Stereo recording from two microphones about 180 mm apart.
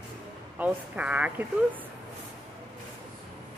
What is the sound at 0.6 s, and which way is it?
Speech, 5° right (ahead or behind).